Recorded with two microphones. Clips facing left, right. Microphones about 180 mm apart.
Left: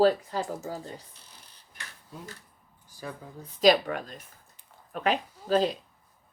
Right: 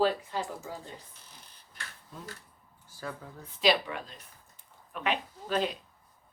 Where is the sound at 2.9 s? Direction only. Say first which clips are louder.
Even; 15° left (ahead or behind).